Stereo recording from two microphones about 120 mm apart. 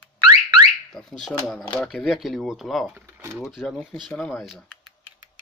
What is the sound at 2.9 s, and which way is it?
Speech, 20° right (ahead or behind).